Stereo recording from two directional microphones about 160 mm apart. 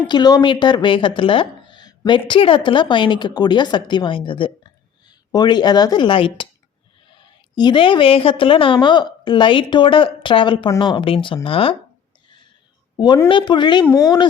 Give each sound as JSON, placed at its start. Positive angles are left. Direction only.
{"t": 0.1, "sound": "speech", "side_deg": 25}
{"t": 7.5, "sound": "a woman's voice", "side_deg": 30}
{"t": 13.2, "sound": "speech", "side_deg": 30}